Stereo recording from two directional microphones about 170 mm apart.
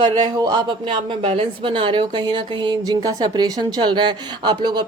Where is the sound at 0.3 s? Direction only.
25° right (ahead or behind).